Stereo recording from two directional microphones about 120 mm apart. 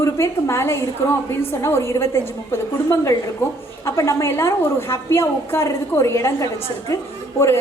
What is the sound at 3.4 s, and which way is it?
A woman's voice, 20° left (ahead or behind).